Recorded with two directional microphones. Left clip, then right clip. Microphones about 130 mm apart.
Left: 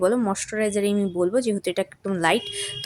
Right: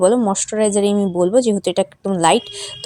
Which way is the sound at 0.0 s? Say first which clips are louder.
Right 7 dB; 25° right (ahead or behind).